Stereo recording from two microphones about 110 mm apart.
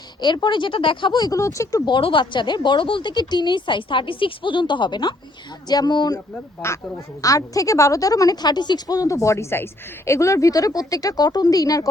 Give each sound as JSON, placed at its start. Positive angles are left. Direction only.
{"t": 0.4, "sound": "a woman's voice", "side_deg": 45}
{"t": 1.9, "sound": "a woman's voice", "side_deg": 50}
{"t": 6.6, "sound": "a woman's voice", "side_deg": 25}